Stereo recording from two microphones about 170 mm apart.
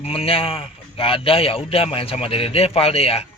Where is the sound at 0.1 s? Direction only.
35° left (ahead or behind).